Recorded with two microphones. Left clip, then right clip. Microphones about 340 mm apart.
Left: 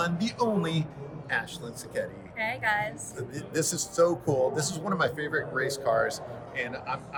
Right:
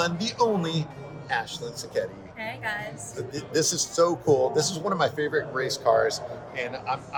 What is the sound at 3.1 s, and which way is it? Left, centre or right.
Speech, centre.